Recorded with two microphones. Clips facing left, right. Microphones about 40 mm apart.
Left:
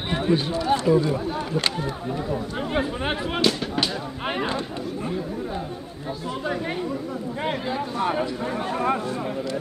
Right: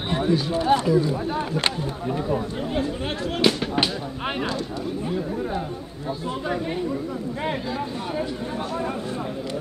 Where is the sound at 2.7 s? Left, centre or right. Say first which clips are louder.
Left 2 dB; left.